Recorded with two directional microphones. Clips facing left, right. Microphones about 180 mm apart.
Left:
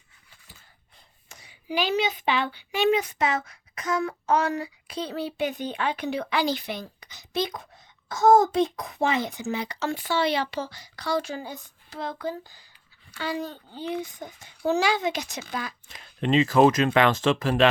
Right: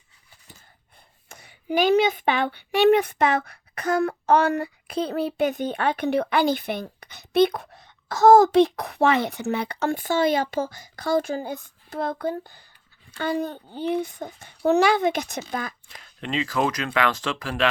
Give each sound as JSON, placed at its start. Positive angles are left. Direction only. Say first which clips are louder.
{"t": 1.3, "sound": "speech", "louder": "right 5 dB", "side_deg": -55}
{"t": 16.0, "sound": "speech", "louder": "left 6 dB", "side_deg": 20}